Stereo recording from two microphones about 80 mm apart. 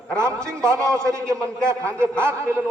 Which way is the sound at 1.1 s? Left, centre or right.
Right.